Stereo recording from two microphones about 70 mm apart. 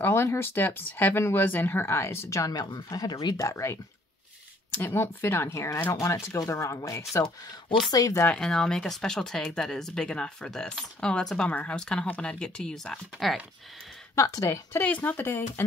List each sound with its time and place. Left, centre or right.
0.0 s speech: left
2.5 s speech: left
2.9 s speech: left
4.7 s speech: left
8.3 s speech: centre
14.1 s speech: left
14.8 s speech: left